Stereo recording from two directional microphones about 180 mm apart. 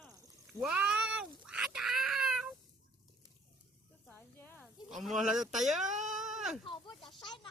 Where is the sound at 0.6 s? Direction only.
5° right (ahead or behind).